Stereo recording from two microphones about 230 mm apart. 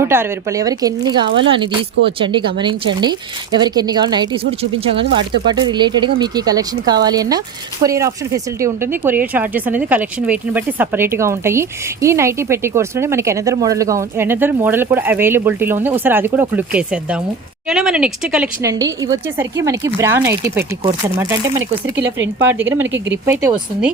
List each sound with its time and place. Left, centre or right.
0.0 s speech: centre
5.5 s speech: centre
18.6 s speech: centre